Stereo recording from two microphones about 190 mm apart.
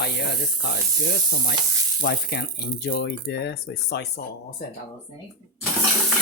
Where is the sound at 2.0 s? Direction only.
60° left (ahead or behind).